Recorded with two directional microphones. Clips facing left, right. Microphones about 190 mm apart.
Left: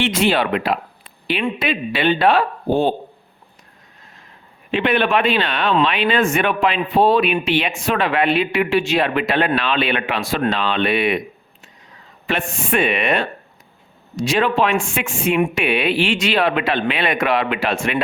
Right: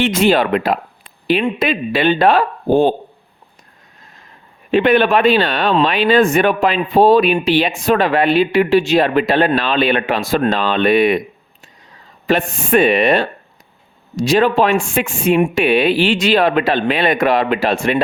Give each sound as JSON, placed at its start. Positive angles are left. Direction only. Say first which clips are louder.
{"t": 0.0, "sound": "speech", "louder": "right 4 dB", "side_deg": -45}
{"t": 4.7, "sound": "speech", "louder": "right 5 dB", "side_deg": -40}
{"t": 12.2, "sound": "speech", "louder": "right 6 dB", "side_deg": -40}